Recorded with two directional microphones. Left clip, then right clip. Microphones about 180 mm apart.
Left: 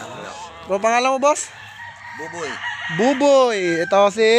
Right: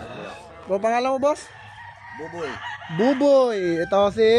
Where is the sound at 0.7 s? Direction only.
15° left (ahead or behind).